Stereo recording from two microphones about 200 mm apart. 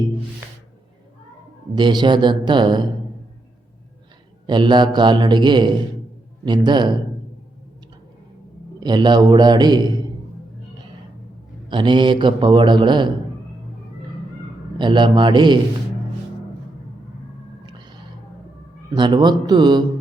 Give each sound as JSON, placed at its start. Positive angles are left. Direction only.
{"t": 1.7, "sound": "a man's voice", "side_deg": -20}
{"t": 4.4, "sound": "a man's voice", "side_deg": -25}
{"t": 8.8, "sound": "a man's voice", "side_deg": -20}
{"t": 11.7, "sound": "a man's voice", "side_deg": -25}
{"t": 14.8, "sound": "a man's voice", "side_deg": -25}
{"t": 17.7, "sound": "a sound", "side_deg": -20}
{"t": 18.9, "sound": "a man's voice", "side_deg": -20}